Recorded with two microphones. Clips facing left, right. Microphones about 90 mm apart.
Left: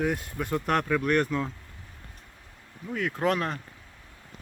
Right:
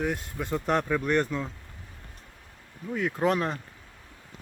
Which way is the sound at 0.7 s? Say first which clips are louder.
Left 1 dB; 5° right (ahead or behind).